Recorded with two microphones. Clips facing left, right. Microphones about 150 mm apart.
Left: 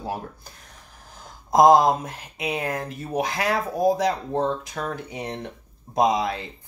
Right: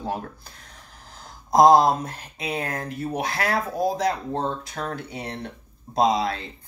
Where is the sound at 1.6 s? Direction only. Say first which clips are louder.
Even; 15° left (ahead or behind).